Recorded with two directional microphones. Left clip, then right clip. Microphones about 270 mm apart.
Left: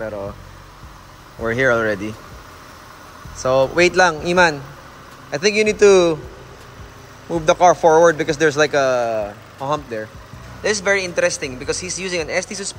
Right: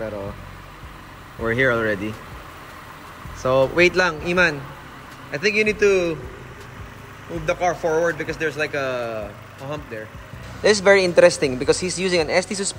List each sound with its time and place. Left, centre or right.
1.4 s a man's voice: centre
3.3 s speech: centre
7.4 s a man's voice: centre